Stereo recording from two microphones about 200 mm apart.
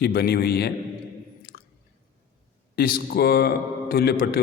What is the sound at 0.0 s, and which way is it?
Speech, 50° left (ahead or behind).